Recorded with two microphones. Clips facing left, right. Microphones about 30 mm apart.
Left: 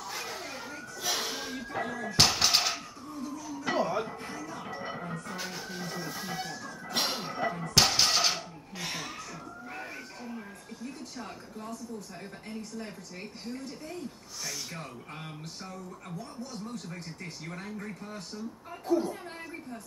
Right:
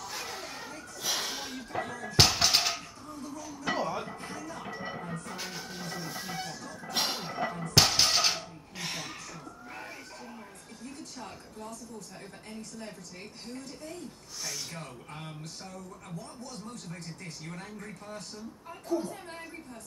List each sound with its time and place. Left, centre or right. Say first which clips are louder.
0.0 s a sound: left 1 dB; centre
12.4 s a woman's voice: left 3 dB; centre
18.9 s a woman's voice: left 4 dB; centre